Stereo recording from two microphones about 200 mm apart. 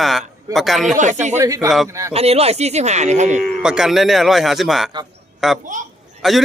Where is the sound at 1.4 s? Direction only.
15° right (ahead or behind).